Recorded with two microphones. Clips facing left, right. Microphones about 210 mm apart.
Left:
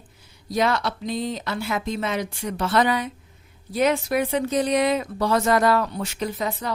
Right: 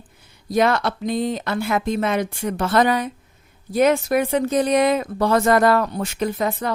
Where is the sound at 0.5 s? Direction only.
55° right (ahead or behind).